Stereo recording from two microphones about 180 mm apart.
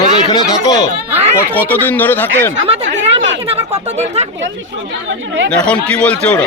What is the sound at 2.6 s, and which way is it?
Chatter, 35° right (ahead or behind).